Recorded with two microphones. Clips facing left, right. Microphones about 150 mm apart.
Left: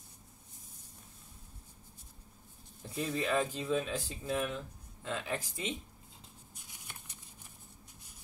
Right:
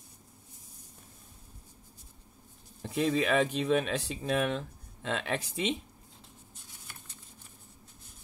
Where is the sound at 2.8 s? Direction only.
85° right.